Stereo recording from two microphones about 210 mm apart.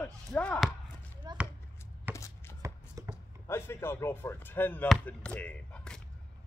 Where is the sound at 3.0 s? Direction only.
15° right (ahead or behind).